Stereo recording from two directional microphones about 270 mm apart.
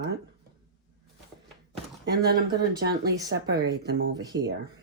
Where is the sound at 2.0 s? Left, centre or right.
Right.